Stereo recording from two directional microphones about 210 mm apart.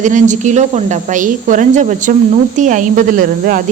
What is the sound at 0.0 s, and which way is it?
Speech, 35° right (ahead or behind).